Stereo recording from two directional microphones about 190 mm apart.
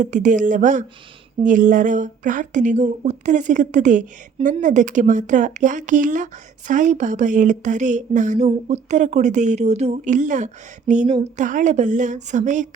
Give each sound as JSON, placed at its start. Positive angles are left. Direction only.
{"t": 0.0, "sound": "speech", "side_deg": -40}